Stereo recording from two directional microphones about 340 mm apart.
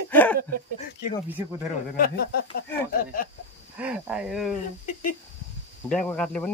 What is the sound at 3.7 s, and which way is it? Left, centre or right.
Speech, centre.